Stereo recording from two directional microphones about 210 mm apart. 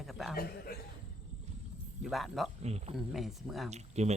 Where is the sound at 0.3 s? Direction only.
45° left (ahead or behind).